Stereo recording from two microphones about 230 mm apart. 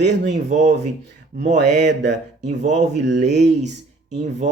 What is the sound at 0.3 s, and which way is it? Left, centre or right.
Speech, right.